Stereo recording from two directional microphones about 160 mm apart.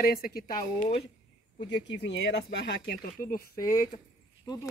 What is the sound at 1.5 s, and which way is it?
Speech, 90° left.